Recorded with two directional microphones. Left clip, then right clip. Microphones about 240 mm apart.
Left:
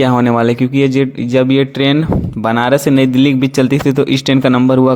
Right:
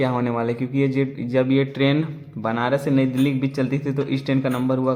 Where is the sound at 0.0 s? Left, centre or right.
Left.